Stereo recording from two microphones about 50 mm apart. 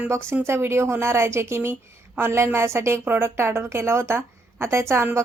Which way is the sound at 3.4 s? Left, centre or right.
Right.